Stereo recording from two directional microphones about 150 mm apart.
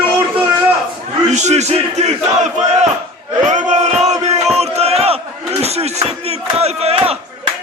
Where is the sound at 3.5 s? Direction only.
50° right (ahead or behind).